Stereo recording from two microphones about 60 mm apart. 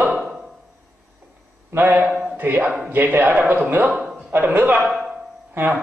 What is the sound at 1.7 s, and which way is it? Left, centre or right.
A man's voice, right.